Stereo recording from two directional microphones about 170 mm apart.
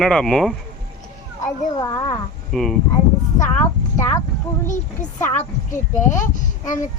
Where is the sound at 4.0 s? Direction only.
20° left (ahead or behind).